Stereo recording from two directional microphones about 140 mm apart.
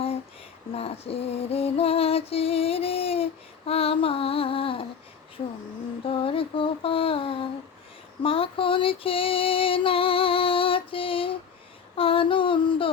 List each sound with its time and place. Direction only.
0.7 s female singing: 45° left (ahead or behind)
6.1 s a sound: 40° left (ahead or behind)
8.2 s female singing: 40° left (ahead or behind)